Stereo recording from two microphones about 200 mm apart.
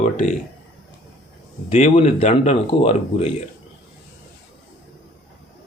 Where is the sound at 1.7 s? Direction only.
30° left (ahead or behind).